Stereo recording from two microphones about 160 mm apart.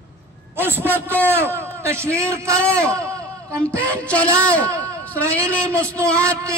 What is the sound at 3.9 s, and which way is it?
Speech, 10° left (ahead or behind).